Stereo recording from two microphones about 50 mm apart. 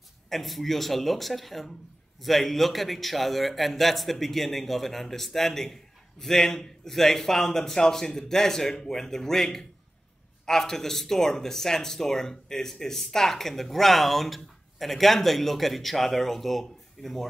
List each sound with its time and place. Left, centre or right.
0.3 s a man's voice: centre